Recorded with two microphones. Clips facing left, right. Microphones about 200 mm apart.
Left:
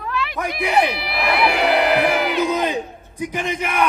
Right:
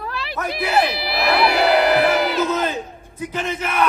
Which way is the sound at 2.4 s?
15° left (ahead or behind).